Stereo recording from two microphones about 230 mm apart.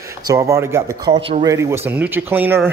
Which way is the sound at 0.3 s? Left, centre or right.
Centre.